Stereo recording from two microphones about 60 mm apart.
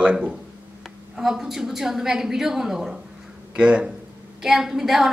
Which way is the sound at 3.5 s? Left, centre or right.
Right.